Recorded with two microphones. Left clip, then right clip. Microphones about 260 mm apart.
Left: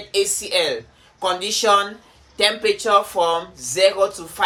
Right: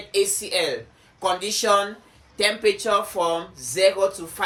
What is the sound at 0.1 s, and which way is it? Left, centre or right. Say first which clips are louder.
Speech: left 2 dB; centre.